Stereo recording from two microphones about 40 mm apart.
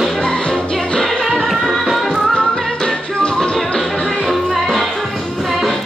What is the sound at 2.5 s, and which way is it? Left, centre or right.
Music, centre.